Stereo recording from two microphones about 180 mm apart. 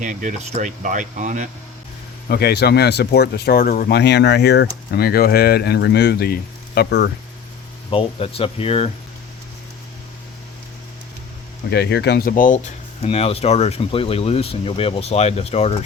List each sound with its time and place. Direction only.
0.0 s speech: 45° right (ahead or behind)
2.3 s speech: 65° left (ahead or behind)
7.9 s speech: 30° left (ahead or behind)
11.7 s speech: 65° left (ahead or behind)
12.3 s speech: 45° left (ahead or behind)